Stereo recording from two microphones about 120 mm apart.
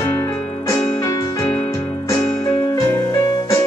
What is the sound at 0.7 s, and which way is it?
Music, 25° left (ahead or behind).